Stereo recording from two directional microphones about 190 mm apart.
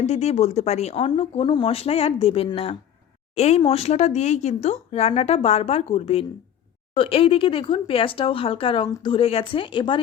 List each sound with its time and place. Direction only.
0.0 s speech: 35° left (ahead or behind)